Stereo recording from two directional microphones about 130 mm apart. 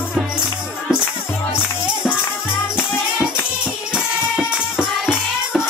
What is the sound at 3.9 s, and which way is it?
Music, 5° right (ahead or behind).